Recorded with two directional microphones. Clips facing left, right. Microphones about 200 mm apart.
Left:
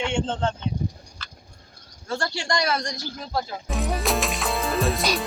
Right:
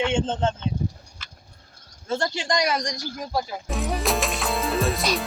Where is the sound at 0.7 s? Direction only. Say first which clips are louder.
Right 1 dB; 15° left (ahead or behind).